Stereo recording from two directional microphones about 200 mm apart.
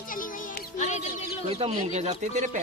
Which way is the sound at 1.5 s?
30° right (ahead or behind).